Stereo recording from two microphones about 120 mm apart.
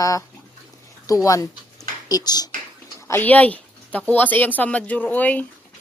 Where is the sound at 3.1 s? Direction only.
15° left (ahead or behind).